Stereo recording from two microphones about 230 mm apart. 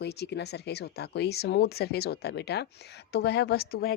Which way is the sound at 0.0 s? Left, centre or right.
Left.